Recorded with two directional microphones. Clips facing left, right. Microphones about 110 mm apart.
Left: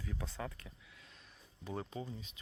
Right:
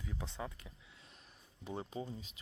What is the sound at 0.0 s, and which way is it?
Speech, 20° right (ahead or behind).